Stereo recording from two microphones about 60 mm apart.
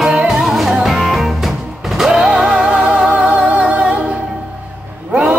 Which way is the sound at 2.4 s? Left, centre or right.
Centre.